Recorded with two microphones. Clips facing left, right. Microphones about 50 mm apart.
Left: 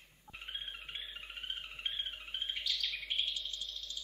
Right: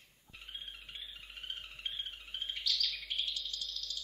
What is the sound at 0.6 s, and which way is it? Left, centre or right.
Music, left.